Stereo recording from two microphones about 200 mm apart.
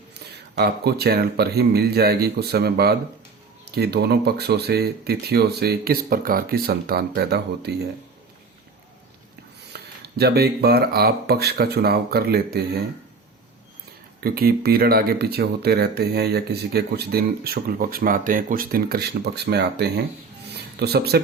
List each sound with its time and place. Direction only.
0.5 s speech: 55° right (ahead or behind)
10.0 s speech: 50° right (ahead or behind)
14.2 s speech: 50° right (ahead or behind)
20.5 s a sound: 55° right (ahead or behind)